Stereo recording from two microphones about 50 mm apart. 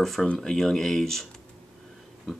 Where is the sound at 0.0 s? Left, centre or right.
Centre.